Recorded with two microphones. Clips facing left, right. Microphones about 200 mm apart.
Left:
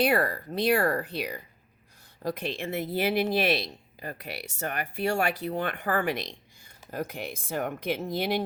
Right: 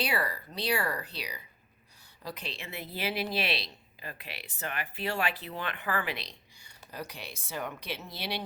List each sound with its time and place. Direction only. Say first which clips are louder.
0.0 s speech: left 8 dB; 50° left (ahead or behind)